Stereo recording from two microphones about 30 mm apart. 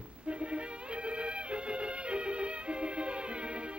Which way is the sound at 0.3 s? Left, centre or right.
Right.